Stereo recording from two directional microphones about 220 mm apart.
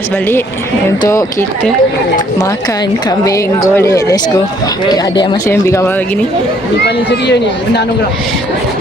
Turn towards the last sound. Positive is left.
turn(degrees=50)  # may be behind; listen again after turning